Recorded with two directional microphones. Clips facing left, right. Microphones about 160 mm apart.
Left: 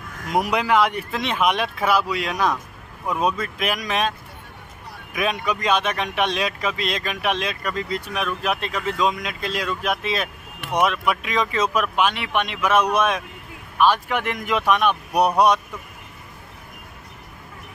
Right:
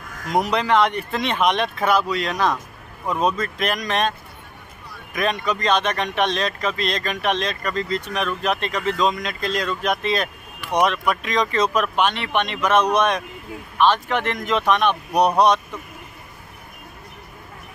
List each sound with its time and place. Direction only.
0.3 s speech: 10° left (ahead or behind)
5.1 s speech: 5° left (ahead or behind)